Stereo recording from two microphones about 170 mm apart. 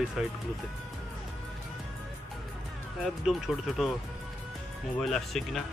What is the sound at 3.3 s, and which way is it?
Speech, centre (ahead or behind).